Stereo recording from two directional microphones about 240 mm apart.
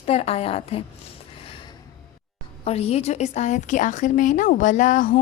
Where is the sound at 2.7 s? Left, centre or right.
Left.